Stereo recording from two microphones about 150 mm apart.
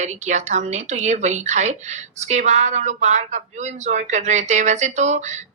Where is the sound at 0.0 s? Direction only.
50° right (ahead or behind).